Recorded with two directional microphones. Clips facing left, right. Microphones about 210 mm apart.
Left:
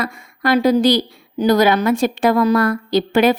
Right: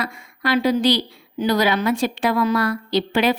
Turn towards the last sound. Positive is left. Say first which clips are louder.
# left 5 dB
turn(degrees=45)  # may be behind; listen again after turning